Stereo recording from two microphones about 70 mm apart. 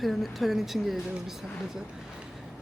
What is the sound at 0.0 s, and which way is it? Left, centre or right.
Speech, centre.